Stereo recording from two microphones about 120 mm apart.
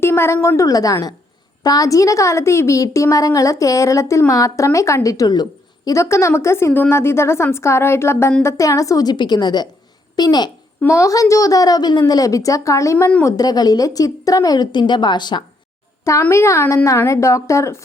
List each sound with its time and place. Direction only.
0.0 s a woman's voice: 20° left (ahead or behind)
10.8 s a woman's voice: 25° left (ahead or behind)
16.3 s a woman's voice: 25° left (ahead or behind)